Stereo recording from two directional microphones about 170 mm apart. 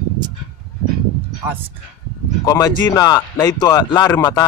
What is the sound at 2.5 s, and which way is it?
Speech, 20° left (ahead or behind).